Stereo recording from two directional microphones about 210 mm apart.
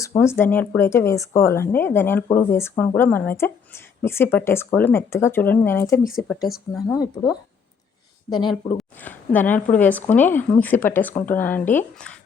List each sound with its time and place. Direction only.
0.2 s speech: 10° left (ahead or behind)
6.1 s speech: centre (ahead or behind)
6.8 s speech: 15° left (ahead or behind)
8.8 s a sound: 10° left (ahead or behind)
9.7 s speech: 10° left (ahead or behind)